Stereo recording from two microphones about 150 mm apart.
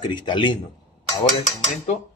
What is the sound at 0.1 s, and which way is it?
Speech, 30° left (ahead or behind).